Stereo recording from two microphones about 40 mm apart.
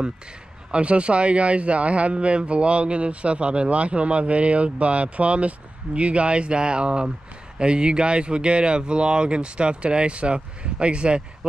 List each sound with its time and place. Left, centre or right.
0.7 s speech: right